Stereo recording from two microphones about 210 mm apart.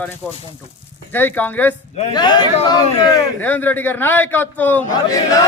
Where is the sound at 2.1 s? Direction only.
20° left (ahead or behind).